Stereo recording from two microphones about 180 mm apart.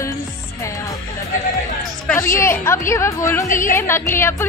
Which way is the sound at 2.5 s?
15° left (ahead or behind).